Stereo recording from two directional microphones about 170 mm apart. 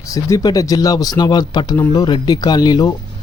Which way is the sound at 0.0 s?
20° left (ahead or behind).